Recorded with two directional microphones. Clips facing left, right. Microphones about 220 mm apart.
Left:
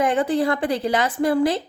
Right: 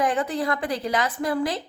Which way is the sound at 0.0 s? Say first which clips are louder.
Left 5 dB; 25° left (ahead or behind).